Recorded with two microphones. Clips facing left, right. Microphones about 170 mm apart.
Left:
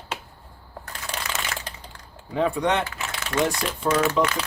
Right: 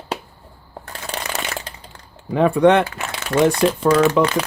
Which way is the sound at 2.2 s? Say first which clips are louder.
Right 9 dB; 60° right (ahead or behind).